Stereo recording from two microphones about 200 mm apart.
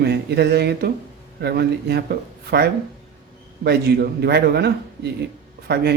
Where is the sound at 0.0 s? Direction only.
55° right (ahead or behind).